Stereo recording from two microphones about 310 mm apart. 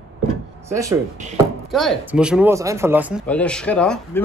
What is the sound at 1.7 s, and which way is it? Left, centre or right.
Speech, centre.